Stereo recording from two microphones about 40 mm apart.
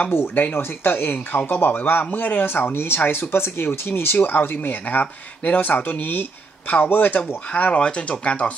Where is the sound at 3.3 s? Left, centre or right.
Left.